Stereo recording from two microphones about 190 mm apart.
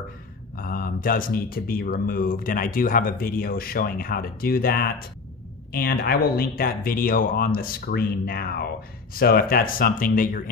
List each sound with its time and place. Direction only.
0.6 s speech: 50° left (ahead or behind)